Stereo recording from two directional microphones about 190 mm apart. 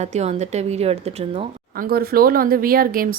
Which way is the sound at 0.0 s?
35° right (ahead or behind).